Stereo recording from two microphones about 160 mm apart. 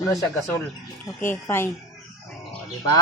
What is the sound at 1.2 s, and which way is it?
Speech, 15° left (ahead or behind).